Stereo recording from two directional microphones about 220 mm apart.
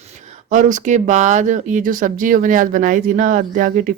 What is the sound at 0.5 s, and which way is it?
Speech, 35° right (ahead or behind).